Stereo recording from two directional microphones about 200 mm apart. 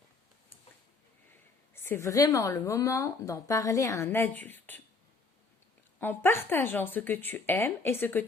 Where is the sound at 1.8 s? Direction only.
10° left (ahead or behind).